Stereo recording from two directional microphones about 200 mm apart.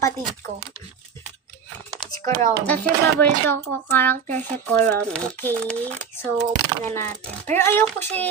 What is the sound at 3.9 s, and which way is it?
Speech, 10° left (ahead or behind).